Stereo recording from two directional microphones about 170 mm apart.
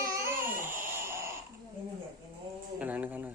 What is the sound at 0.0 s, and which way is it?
Babbling, 15° right (ahead or behind).